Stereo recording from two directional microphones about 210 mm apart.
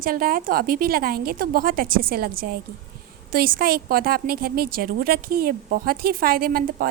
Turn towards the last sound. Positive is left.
turn(degrees=-45)  # may be behind; listen again after turning